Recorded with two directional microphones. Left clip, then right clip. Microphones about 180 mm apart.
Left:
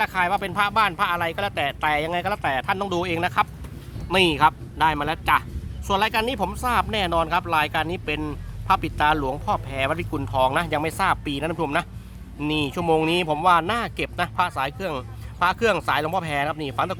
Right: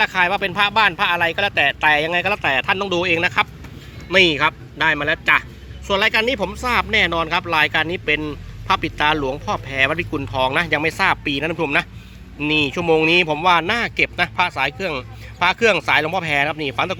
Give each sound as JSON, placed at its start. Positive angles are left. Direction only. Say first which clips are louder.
{"t": 0.0, "sound": "speech", "louder": "right 5 dB", "side_deg": -5}